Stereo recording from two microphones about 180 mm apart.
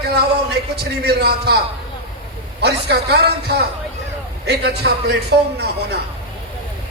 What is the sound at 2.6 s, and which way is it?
A man's voice, 65° right (ahead or behind).